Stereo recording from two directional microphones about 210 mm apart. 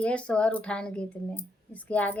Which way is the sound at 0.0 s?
5° left (ahead or behind).